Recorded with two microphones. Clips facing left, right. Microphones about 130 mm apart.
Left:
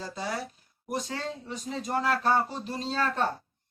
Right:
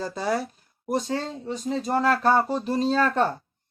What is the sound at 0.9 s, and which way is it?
Speech, 30° right (ahead or behind).